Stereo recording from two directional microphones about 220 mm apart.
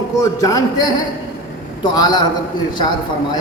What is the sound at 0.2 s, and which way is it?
A man's voice, 15° left (ahead or behind).